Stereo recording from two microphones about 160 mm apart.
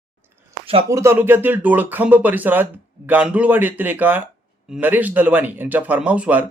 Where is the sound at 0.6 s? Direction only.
35° right (ahead or behind).